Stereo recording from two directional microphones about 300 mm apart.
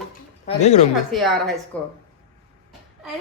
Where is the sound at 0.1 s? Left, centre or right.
Left.